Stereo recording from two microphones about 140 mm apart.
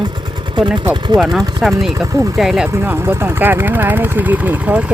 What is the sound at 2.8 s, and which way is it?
Speech, 15° right (ahead or behind).